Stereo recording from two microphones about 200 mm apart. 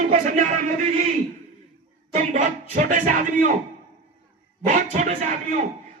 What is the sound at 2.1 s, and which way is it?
Speech, 35° right (ahead or behind).